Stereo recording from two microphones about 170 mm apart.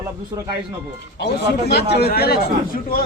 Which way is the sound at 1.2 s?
75° left (ahead or behind).